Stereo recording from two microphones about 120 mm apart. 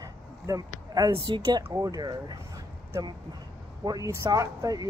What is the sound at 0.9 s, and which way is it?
Speech, 30° right (ahead or behind).